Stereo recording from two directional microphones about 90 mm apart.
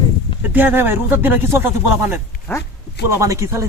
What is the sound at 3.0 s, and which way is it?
Speech, 35° right (ahead or behind).